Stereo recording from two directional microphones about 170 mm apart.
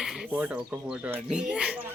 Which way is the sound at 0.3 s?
10° right (ahead or behind).